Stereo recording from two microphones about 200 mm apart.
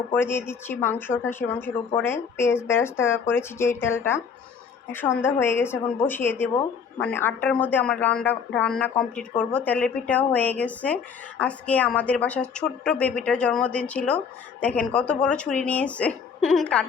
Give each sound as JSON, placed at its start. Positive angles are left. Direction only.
{"t": 0.1, "sound": "speech", "side_deg": 10}